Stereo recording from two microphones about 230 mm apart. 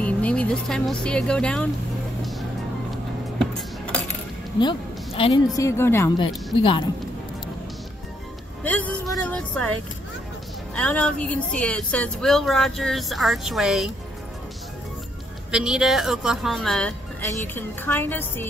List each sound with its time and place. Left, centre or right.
0.0 s speech: centre
3.3 s music: centre
4.6 s a woman's voice: left
8.6 s a woman's voice: centre
15.5 s a woman's voice: centre